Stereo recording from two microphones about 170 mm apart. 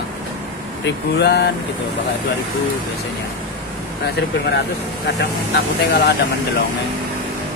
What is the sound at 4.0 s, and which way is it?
Speech, 75° left (ahead or behind).